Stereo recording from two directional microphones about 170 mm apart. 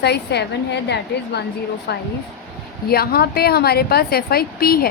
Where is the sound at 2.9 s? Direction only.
65° left (ahead or behind).